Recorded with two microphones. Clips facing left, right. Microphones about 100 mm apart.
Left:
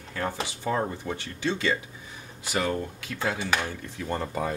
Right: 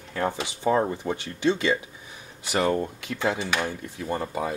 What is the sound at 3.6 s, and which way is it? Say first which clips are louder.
Speech: right 3 dB; 15° right (ahead or behind).